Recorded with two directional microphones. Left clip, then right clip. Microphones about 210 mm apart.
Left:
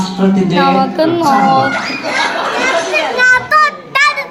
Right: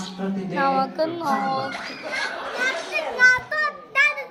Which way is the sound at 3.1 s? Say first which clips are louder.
Left 8 dB; 15° left (ahead or behind).